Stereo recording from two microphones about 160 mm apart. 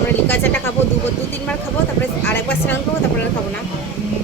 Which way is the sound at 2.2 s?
15° left (ahead or behind).